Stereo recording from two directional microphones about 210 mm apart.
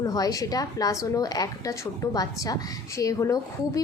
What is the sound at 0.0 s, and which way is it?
A woman's voice, 15° left (ahead or behind).